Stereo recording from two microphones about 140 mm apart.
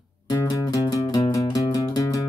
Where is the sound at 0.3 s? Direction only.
25° left (ahead or behind).